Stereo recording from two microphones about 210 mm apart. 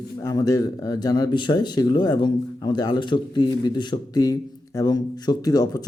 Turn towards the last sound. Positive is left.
turn(degrees=15)  # may be behind; listen again after turning